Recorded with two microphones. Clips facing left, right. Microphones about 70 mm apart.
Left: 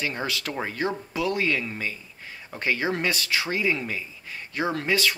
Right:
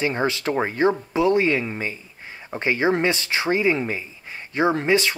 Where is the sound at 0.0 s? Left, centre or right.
Right.